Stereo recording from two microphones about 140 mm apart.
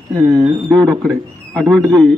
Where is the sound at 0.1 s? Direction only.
25° right (ahead or behind).